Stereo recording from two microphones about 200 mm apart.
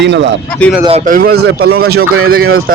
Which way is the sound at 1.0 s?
45° right (ahead or behind).